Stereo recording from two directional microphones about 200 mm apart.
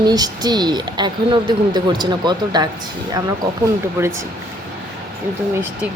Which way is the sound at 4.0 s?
15° right (ahead or behind).